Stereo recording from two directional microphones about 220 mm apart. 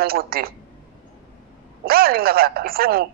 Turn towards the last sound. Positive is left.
turn(degrees=-45)  # may be behind; listen again after turning